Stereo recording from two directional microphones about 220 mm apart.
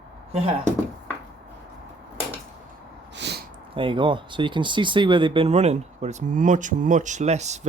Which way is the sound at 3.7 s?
20° right (ahead or behind).